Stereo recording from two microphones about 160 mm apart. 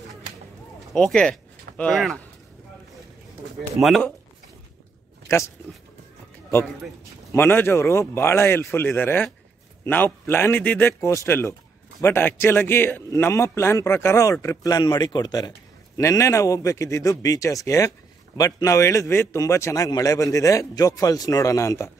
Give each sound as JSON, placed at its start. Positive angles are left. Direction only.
{"t": 0.9, "sound": "speech", "side_deg": 5}
{"t": 7.3, "sound": "a man's voice", "side_deg": 15}